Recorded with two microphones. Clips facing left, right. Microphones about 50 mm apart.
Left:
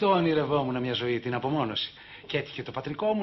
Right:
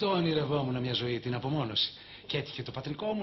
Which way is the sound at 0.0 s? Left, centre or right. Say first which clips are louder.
Left 5 dB; left.